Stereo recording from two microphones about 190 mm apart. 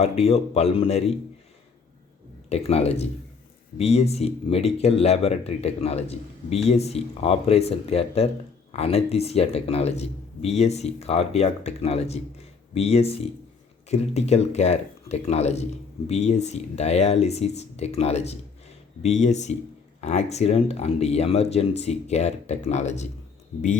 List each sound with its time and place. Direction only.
0.0 s a man's voice: 35° left (ahead or behind)
2.5 s a man's voice: 35° left (ahead or behind)